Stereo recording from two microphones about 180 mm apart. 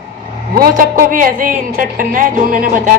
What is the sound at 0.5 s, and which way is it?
A woman's voice, 50° right (ahead or behind).